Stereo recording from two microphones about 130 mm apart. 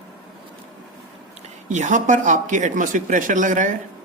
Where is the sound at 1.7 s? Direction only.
70° right (ahead or behind).